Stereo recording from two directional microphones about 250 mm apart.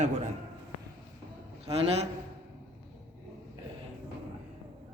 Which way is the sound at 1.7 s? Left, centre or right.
Right.